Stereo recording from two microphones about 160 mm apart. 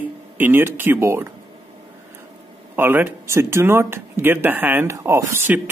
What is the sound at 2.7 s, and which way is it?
Speech, 15° right (ahead or behind).